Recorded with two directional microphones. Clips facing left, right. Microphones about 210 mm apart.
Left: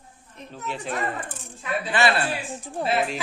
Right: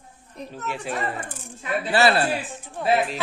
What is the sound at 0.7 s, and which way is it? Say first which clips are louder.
Speech: even; 10° right (ahead or behind).